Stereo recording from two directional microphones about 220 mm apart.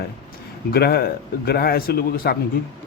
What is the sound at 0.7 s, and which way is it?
A man's voice, 45° left (ahead or behind).